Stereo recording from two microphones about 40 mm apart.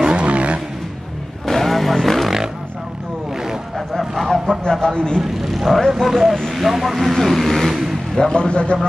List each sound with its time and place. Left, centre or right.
0.0 s vehicle: right
1.4 s vehicle: centre
3.3 s a sound: centre
4.3 s a sound: centre
4.8 s a man's voice: centre
5.2 s speech: centre
6.3 s vehicle: centre
6.6 s speech: centre
8.3 s a man's voice: left